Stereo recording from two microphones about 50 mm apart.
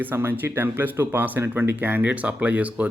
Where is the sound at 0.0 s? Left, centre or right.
Right.